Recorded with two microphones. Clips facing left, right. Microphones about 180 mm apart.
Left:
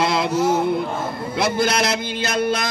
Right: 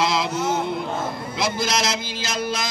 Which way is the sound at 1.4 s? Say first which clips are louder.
Left 5 dB; 60° left (ahead or behind).